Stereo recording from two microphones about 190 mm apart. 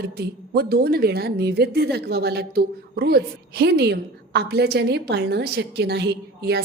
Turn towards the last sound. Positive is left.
turn(degrees=-60)  # may be behind; listen again after turning